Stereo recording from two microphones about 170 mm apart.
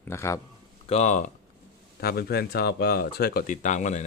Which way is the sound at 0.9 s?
40° left (ahead or behind).